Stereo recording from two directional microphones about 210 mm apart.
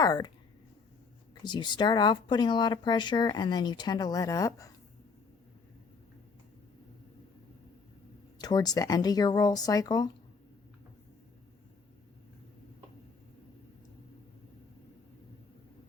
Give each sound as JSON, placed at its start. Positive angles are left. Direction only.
{"t": 0.0, "sound": "speech", "side_deg": 15}
{"t": 1.5, "sound": "speech", "side_deg": 20}
{"t": 8.4, "sound": "speech", "side_deg": 20}